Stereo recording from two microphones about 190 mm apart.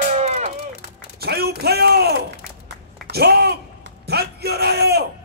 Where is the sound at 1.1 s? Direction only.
55° right (ahead or behind).